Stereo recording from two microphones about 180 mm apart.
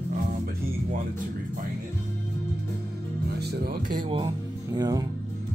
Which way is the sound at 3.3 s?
65° right (ahead or behind).